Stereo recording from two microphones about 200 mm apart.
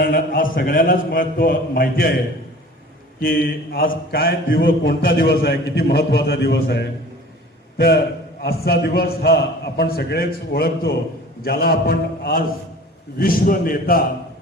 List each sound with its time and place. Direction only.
0.0 s a man's voice: 45° left (ahead or behind)
3.2 s a man's voice: 45° left (ahead or behind)